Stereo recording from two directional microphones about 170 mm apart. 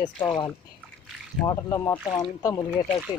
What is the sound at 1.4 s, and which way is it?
Speech, 20° left (ahead or behind).